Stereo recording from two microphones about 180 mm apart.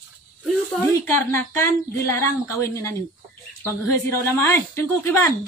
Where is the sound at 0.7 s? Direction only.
10° left (ahead or behind).